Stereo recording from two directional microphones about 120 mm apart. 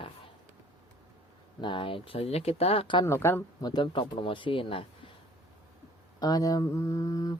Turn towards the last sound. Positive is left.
turn(degrees=30)  # may be behind; listen again after turning